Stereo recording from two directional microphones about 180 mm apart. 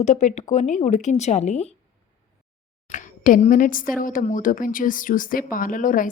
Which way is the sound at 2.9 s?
45° left (ahead or behind).